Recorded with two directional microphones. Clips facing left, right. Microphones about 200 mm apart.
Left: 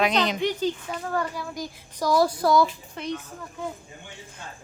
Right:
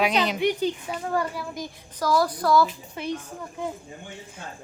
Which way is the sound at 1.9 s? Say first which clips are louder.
Left 1 dB; 20° left (ahead or behind).